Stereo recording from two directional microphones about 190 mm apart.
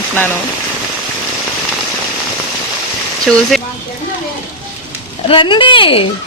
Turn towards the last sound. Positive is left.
turn(degrees=25)  # may be behind; listen again after turning